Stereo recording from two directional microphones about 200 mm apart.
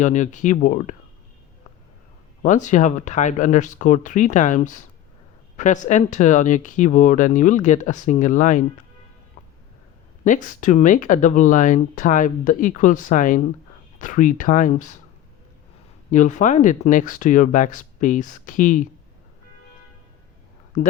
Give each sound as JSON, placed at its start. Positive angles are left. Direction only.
{"t": 0.0, "sound": "speech", "side_deg": 35}
{"t": 2.4, "sound": "speech", "side_deg": 40}
{"t": 10.2, "sound": "speech", "side_deg": 40}
{"t": 16.1, "sound": "speech", "side_deg": 40}